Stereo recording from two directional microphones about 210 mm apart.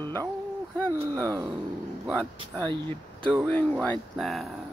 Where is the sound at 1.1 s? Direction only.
15° right (ahead or behind).